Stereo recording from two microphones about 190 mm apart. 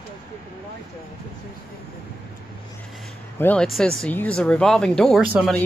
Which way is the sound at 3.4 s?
5° left (ahead or behind).